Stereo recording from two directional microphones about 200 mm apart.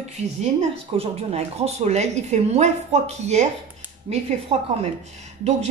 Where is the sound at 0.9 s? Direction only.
30° right (ahead or behind).